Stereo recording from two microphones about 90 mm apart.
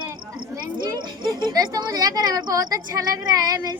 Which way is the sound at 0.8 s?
55° right (ahead or behind).